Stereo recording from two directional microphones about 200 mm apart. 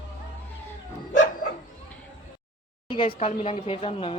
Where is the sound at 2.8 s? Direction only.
25° left (ahead or behind).